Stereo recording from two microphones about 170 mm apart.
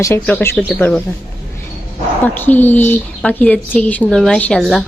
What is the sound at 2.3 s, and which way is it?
Speech, 10° left (ahead or behind).